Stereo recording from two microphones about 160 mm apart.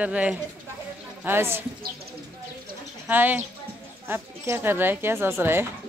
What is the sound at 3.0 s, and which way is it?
Speech, 10° right (ahead or behind).